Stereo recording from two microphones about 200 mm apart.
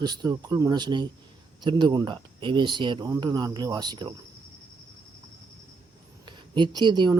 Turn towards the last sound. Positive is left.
turn(degrees=-20)  # may be behind; listen again after turning